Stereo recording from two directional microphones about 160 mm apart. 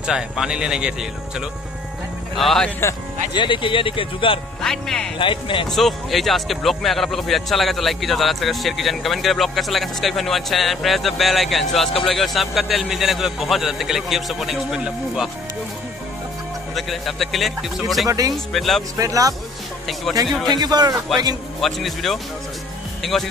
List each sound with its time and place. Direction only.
0.0 s speech: 5° right (ahead or behind)
2.3 s speech: centre (ahead or behind)
3.3 s speech: 30° left (ahead or behind)
4.6 s speech: 5° left (ahead or behind)
5.2 s speech: 30° left (ahead or behind)
5.7 s speech: centre (ahead or behind)
16.7 s speech: centre (ahead or behind)
18.0 s speech: 20° right (ahead or behind)
18.3 s speech: centre (ahead or behind)
18.9 s speech: 20° right (ahead or behind)
20.4 s speech: 25° right (ahead or behind)
21.5 s speech: centre (ahead or behind)